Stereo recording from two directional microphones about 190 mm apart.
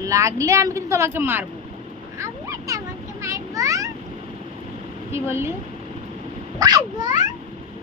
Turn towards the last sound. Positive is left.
turn(degrees=-20)  # may be behind; listen again after turning